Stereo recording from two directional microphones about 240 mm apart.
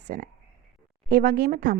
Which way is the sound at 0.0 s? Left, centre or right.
Right.